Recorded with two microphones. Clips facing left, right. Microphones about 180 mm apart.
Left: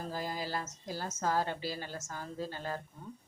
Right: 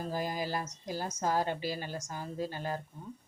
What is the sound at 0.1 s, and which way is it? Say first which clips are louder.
Speech: right 3 dB; 15° right (ahead or behind).